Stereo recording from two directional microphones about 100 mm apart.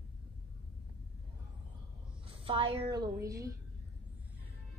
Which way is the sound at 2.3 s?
60° right (ahead or behind).